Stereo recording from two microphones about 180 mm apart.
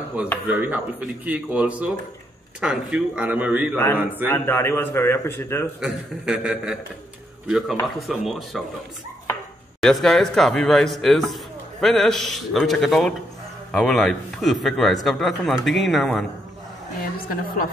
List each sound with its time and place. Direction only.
0.2 s speech: 10° right (ahead or behind)
3.7 s a man's voice: 10° left (ahead or behind)
5.8 s a man's voice: 5° right (ahead or behind)
17.3 s a woman's voice: 55° left (ahead or behind)